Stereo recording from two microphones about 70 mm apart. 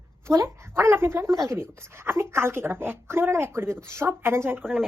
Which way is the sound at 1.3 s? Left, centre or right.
Right.